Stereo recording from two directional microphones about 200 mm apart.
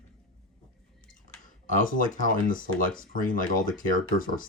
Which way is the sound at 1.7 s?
40° left (ahead or behind).